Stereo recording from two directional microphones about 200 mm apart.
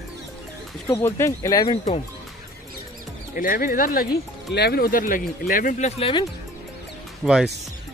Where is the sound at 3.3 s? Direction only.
45° left (ahead or behind).